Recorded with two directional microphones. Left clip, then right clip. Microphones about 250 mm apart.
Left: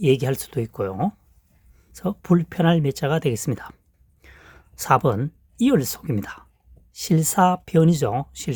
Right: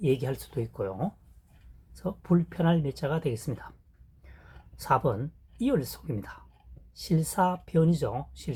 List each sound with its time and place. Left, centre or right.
0.0 s speech: left